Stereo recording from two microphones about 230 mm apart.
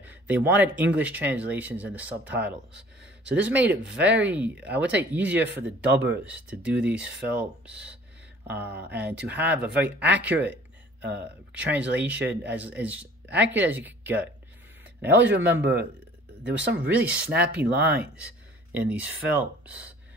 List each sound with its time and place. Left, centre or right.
0.0 s speech: centre
9.7 s speech: right
10.0 s speech: centre
15.0 s speech: right
15.2 s speech: centre
16.8 s speech: centre